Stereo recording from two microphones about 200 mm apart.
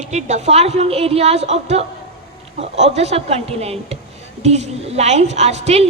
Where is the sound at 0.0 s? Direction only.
35° right (ahead or behind).